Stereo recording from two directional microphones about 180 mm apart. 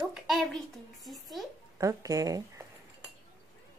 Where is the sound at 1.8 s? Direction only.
20° right (ahead or behind).